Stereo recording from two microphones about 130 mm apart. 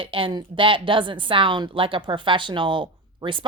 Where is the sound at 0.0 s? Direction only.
40° right (ahead or behind).